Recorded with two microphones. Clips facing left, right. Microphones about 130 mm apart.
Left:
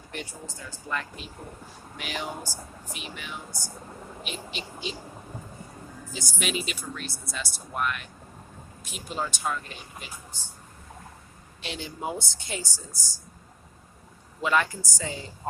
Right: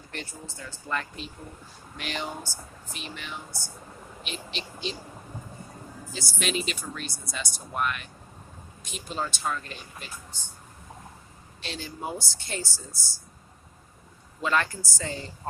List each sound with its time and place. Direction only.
0.1 s speech: 10° left (ahead or behind)
6.1 s speech: 15° left (ahead or behind)
6.5 s speech: 5° left (ahead or behind)
11.6 s speech: 15° left (ahead or behind)
14.4 s speech: 15° left (ahead or behind)